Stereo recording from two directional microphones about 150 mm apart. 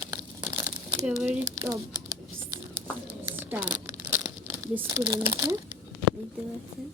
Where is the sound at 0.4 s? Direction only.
15° right (ahead or behind).